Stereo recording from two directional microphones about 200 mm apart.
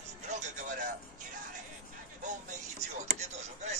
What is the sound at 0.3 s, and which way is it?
Music, 40° right (ahead or behind).